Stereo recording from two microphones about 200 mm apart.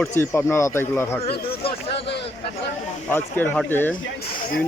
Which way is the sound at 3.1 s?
10° left (ahead or behind).